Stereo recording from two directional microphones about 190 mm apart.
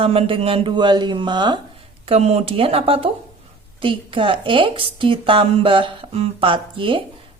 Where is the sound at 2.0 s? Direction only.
35° right (ahead or behind).